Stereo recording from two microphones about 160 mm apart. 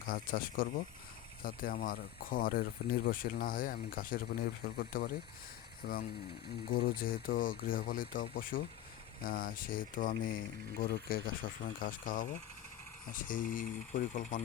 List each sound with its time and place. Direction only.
0.1 s speech: 65° left (ahead or behind)
5.8 s speech: 90° left
6.7 s speech: 65° left (ahead or behind)